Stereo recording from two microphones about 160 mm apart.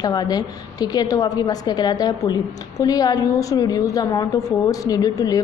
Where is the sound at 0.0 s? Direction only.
25° left (ahead or behind).